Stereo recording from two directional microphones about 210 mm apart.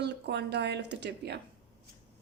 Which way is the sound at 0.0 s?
55° right (ahead or behind).